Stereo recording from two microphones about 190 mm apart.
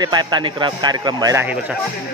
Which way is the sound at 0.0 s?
20° right (ahead or behind).